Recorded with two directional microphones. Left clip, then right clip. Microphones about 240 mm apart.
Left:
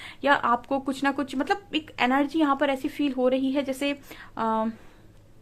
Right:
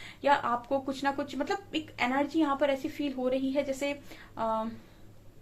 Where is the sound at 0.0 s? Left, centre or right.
Left.